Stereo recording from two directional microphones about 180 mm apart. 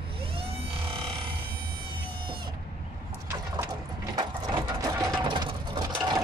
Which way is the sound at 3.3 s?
20° right (ahead or behind).